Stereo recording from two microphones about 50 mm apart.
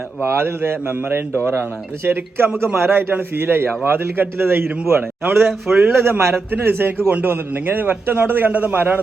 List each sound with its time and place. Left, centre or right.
0.2 s a man's voice: right
3.1 s a man's voice: right
5.4 s speech: centre
5.9 s a man's voice: right